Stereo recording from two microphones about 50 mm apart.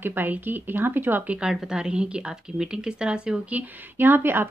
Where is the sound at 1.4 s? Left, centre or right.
Centre.